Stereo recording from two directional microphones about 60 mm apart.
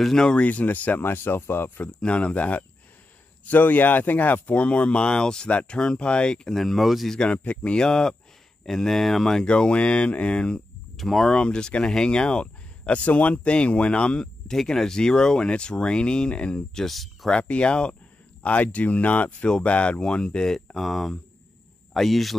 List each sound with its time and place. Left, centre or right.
0.0 s speech: centre
0.5 s speech: left
1.9 s speech: centre
7.2 s speech: centre
11.0 s speech: centre
11.3 s speech: centre
16.8 s speech: centre
17.3 s speech: centre